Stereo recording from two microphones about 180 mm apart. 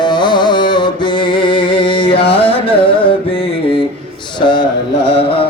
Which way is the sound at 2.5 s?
30° left (ahead or behind).